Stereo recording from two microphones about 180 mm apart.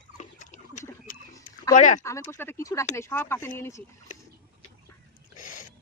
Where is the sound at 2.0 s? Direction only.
15° left (ahead or behind).